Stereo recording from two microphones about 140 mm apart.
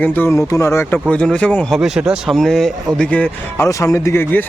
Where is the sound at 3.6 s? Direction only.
20° left (ahead or behind).